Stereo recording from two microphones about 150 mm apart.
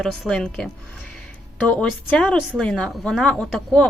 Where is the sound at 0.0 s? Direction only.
5° left (ahead or behind).